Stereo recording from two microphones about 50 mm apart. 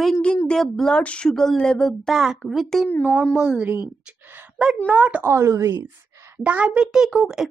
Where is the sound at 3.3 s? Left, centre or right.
Centre.